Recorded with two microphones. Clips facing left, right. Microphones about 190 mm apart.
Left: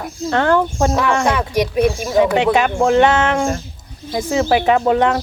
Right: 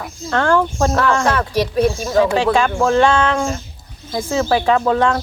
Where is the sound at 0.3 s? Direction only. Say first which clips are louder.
Left 1 dB; 20° left (ahead or behind).